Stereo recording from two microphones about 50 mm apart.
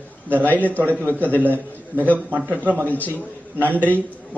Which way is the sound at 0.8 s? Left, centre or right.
Right.